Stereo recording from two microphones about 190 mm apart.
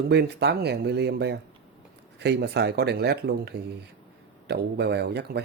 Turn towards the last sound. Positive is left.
turn(degrees=-60)  # may be behind; listen again after turning